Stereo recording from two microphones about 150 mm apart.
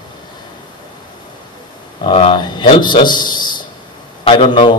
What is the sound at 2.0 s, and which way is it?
A man's voice, 35° left (ahead or behind).